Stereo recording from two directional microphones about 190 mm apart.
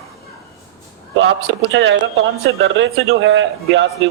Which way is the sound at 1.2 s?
75° right (ahead or behind).